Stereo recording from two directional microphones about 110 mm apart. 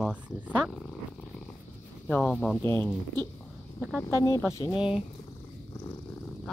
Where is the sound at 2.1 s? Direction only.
Centre (ahead or behind).